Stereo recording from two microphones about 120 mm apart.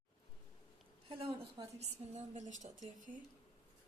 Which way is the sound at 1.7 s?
65° right (ahead or behind).